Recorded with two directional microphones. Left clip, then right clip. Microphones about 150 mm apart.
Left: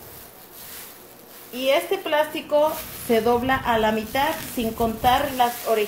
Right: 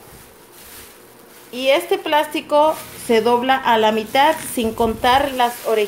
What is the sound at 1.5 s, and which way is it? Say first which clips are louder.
Speech: right 4 dB; 60° right (ahead or behind).